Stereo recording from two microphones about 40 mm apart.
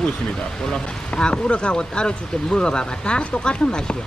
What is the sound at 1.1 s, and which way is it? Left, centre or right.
Speech, left.